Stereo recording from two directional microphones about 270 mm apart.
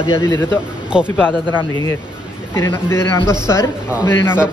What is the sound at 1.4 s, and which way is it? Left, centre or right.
A man's voice, centre.